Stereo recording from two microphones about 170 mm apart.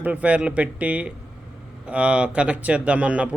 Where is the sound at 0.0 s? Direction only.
10° right (ahead or behind).